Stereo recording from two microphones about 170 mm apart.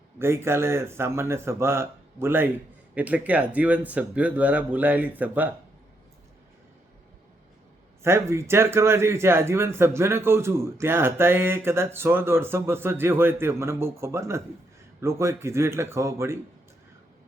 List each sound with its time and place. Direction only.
0.2 s a man's voice: 15° right (ahead or behind)
8.0 s a man's voice: 15° right (ahead or behind)